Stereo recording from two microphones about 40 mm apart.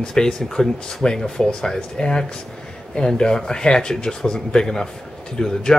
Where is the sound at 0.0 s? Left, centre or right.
Centre.